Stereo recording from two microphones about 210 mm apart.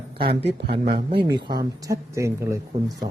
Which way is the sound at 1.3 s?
20° right (ahead or behind).